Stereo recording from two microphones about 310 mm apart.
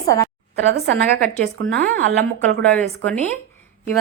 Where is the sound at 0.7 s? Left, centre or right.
Right.